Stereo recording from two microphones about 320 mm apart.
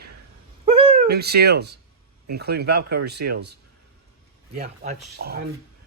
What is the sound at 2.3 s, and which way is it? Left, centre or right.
Speech, right.